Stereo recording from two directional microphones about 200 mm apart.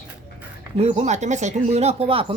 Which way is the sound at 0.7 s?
30° right (ahead or behind).